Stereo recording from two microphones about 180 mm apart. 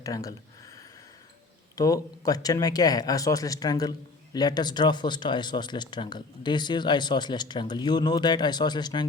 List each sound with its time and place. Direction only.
0.0 s speech: 20° left (ahead or behind)
1.7 s speech: 20° left (ahead or behind)